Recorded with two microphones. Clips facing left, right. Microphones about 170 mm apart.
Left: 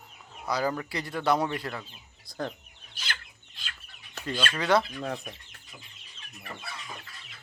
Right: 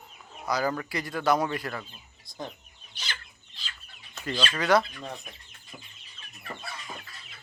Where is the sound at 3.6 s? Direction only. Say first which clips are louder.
Even; 60° left (ahead or behind).